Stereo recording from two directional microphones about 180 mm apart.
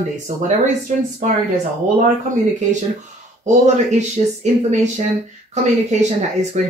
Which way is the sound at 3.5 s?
40° right (ahead or behind).